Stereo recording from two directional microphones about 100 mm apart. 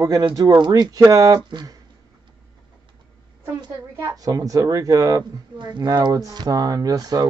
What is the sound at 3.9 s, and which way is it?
Speech, 35° right (ahead or behind).